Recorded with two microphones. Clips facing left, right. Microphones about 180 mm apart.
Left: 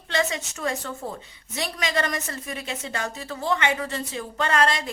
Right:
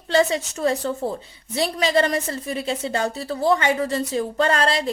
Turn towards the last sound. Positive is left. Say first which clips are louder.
# right 3 dB
turn(degrees=-30)  # may be behind; listen again after turning